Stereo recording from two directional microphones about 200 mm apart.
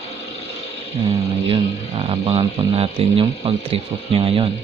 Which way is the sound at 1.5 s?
30° right (ahead or behind).